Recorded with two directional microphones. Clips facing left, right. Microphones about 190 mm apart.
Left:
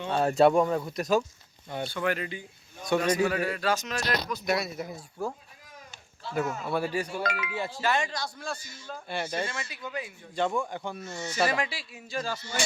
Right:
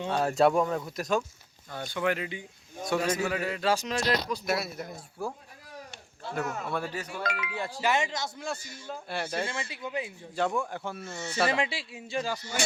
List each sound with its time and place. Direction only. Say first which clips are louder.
0.1 s speech: left 3 dB; centre (ahead or behind)
1.9 s speech: right 2 dB; 15° right (ahead or behind)
2.8 s speech: left 2 dB; 5° right (ahead or behind)
3.2 s a man's voice: left 1 dB; 15° right (ahead or behind)
4.4 s speech: left 2 dB; centre (ahead or behind)
5.2 s speech: left 2 dB; 10° right (ahead or behind)
6.2 s speech: left 3 dB; 55° right (ahead or behind)
6.7 s speech: left 4 dB; 10° left (ahead or behind)
7.8 s a man's voice: right 1 dB; 20° right (ahead or behind)
9.0 s speech: left 1 dB; centre (ahead or behind)
9.5 s a man's voice: right 2 dB; 25° right (ahead or behind)
10.3 s speech: left 1 dB; centre (ahead or behind)
11.4 s a man's voice: right 2 dB; 25° right (ahead or behind)
12.2 s speech: left 2 dB; 15° right (ahead or behind)